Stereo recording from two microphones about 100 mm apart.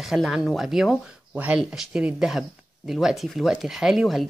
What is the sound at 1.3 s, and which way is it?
Speech, 15° right (ahead or behind).